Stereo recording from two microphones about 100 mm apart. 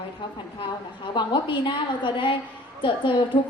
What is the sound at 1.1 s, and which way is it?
A woman's voice, 50° left (ahead or behind).